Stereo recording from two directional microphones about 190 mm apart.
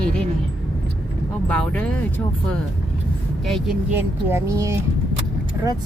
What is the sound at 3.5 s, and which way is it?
Speech, centre (ahead or behind).